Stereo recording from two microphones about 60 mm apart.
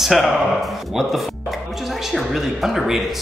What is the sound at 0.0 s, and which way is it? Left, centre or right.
Speech, centre.